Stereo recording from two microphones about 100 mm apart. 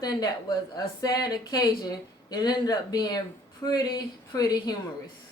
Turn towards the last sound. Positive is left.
turn(degrees=40)  # may be behind; listen again after turning